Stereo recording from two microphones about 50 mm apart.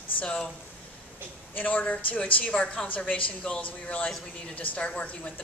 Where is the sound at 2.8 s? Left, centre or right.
Left.